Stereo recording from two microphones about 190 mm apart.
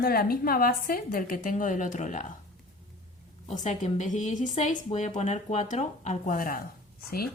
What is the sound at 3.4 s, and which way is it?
Speech, 40° left (ahead or behind).